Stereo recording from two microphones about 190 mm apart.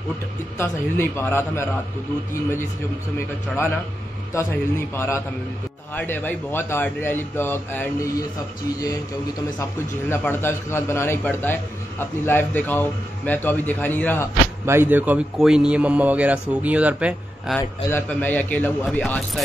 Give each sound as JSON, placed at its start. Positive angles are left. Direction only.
{"t": 0.6, "sound": "a man's voice", "side_deg": 10}
{"t": 4.3, "sound": "a man's voice", "side_deg": 15}
{"t": 9.6, "sound": "a man's voice", "side_deg": 10}
{"t": 14.7, "sound": "speech", "side_deg": -10}
{"t": 17.6, "sound": "a man's voice", "side_deg": 10}